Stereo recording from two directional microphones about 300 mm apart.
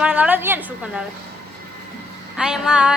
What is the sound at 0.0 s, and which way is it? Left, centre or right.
A woman's voice, centre.